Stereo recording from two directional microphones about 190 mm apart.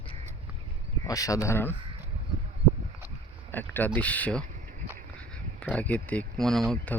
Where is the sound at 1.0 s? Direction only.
20° left (ahead or behind).